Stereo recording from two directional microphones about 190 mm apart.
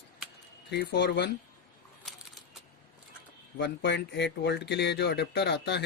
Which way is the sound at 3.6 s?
60° left (ahead or behind).